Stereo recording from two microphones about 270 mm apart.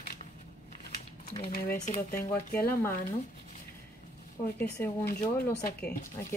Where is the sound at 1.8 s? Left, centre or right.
Left.